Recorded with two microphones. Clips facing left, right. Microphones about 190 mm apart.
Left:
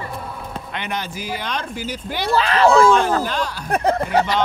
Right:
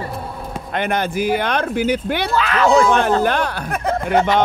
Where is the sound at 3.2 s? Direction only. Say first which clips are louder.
Right 5 dB; 60° right (ahead or behind).